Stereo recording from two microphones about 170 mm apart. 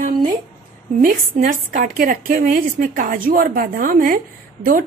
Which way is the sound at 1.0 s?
55° right (ahead or behind).